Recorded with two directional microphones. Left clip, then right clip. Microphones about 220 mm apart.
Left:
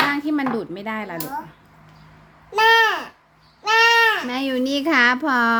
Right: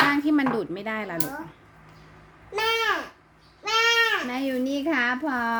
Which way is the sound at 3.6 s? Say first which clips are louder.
Left 6 dB; 45° left (ahead or behind).